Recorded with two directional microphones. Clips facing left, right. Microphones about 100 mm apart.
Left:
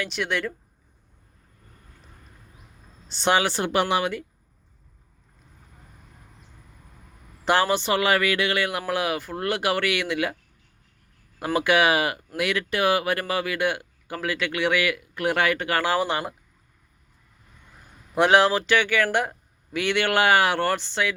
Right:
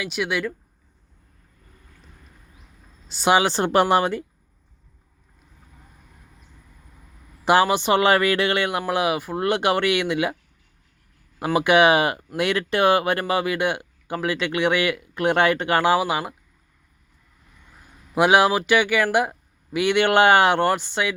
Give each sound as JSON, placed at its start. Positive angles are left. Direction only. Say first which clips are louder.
{"t": 0.0, "sound": "speech", "louder": "right 2 dB", "side_deg": -5}
{"t": 3.1, "sound": "speech", "louder": "right 3 dB", "side_deg": -5}
{"t": 3.3, "sound": "speech", "louder": "right 4 dB", "side_deg": -20}
{"t": 3.6, "sound": "speech", "louder": "right 5 dB", "side_deg": -40}
{"t": 7.4, "sound": "speech", "louder": "right 4 dB", "side_deg": -15}
{"t": 8.0, "sound": "speech", "louder": "right 4 dB", "side_deg": -30}
{"t": 11.3, "sound": "speech", "louder": "right 4 dB", "side_deg": -20}
{"t": 16.0, "sound": "speech", "louder": "right 2 dB", "side_deg": -5}
{"t": 18.1, "sound": "speech", "louder": "right 1 dB", "side_deg": -10}